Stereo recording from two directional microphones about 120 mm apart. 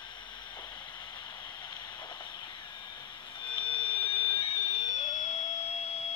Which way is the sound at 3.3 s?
45° left (ahead or behind).